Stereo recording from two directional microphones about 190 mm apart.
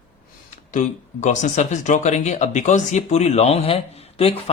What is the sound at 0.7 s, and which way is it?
Speech, 40° left (ahead or behind).